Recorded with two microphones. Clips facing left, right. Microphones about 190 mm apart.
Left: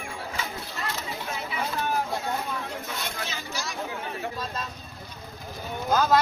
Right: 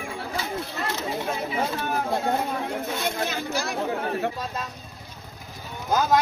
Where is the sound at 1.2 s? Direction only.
50° right (ahead or behind).